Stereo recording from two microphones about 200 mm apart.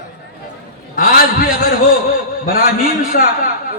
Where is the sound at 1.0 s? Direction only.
45° left (ahead or behind).